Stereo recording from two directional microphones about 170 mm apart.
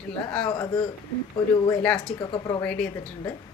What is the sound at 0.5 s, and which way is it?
Speech, 20° left (ahead or behind).